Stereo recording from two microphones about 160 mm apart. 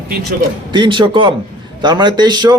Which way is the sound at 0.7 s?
30° right (ahead or behind).